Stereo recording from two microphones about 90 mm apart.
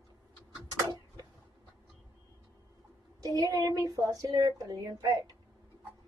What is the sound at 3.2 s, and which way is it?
Speech, 40° right (ahead or behind).